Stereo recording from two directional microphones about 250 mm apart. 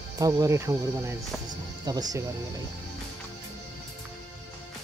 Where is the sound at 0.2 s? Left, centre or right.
Centre.